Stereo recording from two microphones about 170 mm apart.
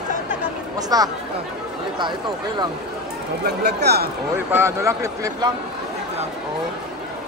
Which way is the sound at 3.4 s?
75° right (ahead or behind).